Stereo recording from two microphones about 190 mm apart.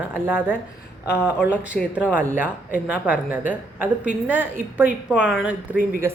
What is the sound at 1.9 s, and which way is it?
Speech, 10° right (ahead or behind).